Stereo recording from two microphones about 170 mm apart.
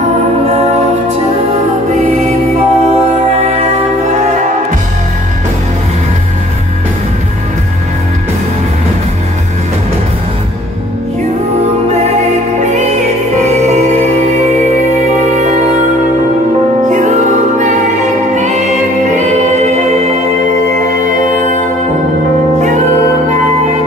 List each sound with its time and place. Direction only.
2.2 s music: 35° right (ahead or behind)
16.9 s music: 45° right (ahead or behind)
19.1 s choir: 40° right (ahead or behind)
21.0 s music: 45° right (ahead or behind)